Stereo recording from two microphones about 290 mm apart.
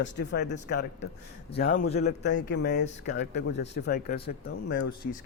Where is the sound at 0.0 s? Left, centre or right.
Left.